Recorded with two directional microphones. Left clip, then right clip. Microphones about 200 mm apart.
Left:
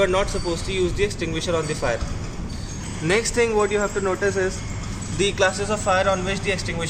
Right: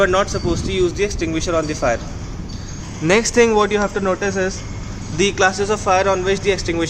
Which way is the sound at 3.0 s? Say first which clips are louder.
Right 6 dB; 55° right (ahead or behind).